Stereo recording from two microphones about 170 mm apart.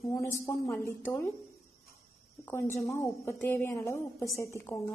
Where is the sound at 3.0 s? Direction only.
15° left (ahead or behind).